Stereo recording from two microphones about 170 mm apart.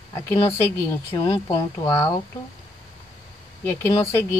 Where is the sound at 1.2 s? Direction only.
25° left (ahead or behind).